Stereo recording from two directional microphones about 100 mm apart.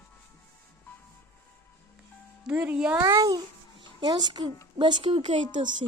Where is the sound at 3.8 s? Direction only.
45° right (ahead or behind).